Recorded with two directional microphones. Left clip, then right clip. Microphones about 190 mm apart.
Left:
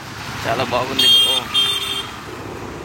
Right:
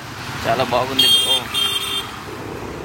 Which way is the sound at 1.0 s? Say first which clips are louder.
Left 2 dB; 70° right (ahead or behind).